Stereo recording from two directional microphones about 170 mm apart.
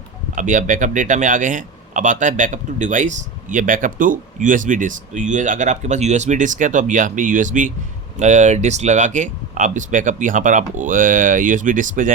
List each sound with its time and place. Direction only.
0.3 s speech: 50° right (ahead or behind)